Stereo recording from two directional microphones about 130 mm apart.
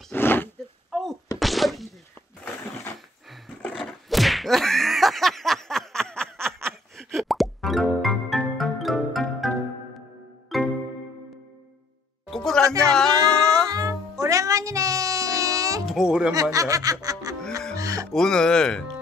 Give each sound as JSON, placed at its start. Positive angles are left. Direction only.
{"t": 0.1, "sound": "roaring cats", "side_deg": 15}
{"t": 1.4, "sound": "a sound", "side_deg": 0}
{"t": 3.3, "sound": "a sound", "side_deg": 0}
{"t": 4.1, "sound": "whack", "side_deg": 0}
{"t": 10.5, "sound": "music", "side_deg": 0}
{"t": 12.3, "sound": "music", "side_deg": 5}
{"t": 13.7, "sound": "music", "side_deg": -25}
{"t": 15.8, "sound": "music", "side_deg": -5}
{"t": 16.3, "sound": "snicker", "side_deg": -25}
{"t": 17.7, "sound": "music", "side_deg": -25}
{"t": 18.1, "sound": "music", "side_deg": 5}